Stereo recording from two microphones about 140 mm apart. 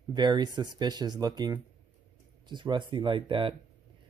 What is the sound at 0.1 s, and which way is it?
Speech, 30° right (ahead or behind).